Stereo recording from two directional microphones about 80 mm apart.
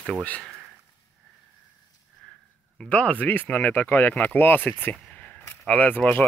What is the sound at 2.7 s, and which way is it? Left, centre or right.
Speech, centre.